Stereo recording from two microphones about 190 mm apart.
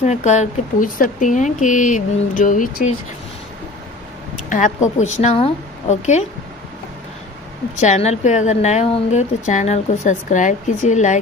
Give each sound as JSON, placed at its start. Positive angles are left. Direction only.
{"t": 0.0, "sound": "a woman's voice", "side_deg": 40}
{"t": 4.5, "sound": "a woman's voice", "side_deg": 40}
{"t": 7.8, "sound": "a woman's voice", "side_deg": 35}